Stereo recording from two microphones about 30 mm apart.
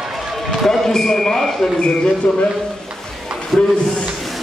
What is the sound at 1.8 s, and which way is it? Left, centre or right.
Speech, left.